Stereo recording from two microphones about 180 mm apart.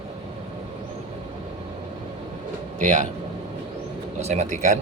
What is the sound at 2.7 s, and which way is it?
Speech, 45° right (ahead or behind).